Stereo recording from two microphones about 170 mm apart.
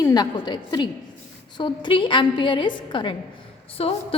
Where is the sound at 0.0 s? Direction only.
25° left (ahead or behind).